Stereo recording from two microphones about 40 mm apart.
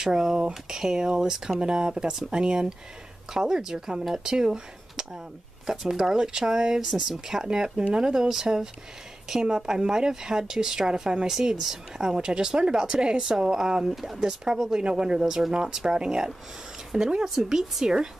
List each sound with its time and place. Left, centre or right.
0.0 s speech: centre
11.2 s speech: centre
17.2 s speech: centre